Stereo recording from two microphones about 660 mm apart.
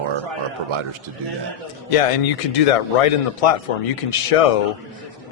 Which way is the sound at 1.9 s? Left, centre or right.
Left.